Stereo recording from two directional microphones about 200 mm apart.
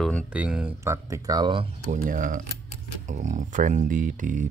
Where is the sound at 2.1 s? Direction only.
40° right (ahead or behind).